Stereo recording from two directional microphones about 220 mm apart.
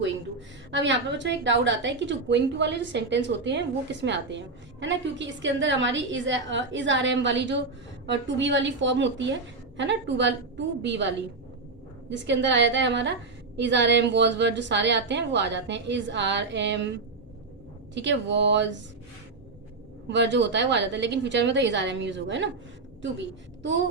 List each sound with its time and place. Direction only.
0.0 s a woman's voice: 55° right (ahead or behind)
12.1 s a woman's voice: 55° right (ahead or behind)
20.1 s a woman's voice: 55° right (ahead or behind)